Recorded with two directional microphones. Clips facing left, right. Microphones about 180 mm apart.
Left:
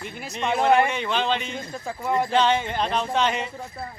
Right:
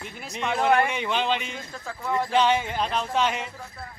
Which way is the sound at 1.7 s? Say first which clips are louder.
Left 3 dB; 15° left (ahead or behind).